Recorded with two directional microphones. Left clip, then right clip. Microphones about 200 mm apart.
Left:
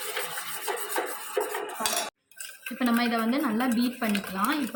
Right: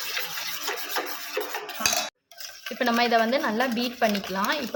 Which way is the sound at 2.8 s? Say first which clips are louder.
Right 5 dB; 55° right (ahead or behind).